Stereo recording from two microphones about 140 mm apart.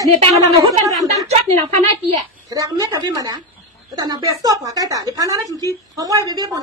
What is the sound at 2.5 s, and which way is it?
A woman's voice, 25° right (ahead or behind).